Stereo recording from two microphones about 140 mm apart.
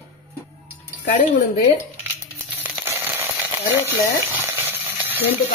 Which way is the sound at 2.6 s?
15° right (ahead or behind).